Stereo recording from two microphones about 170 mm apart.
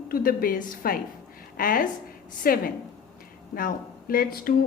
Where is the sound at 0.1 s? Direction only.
55° left (ahead or behind).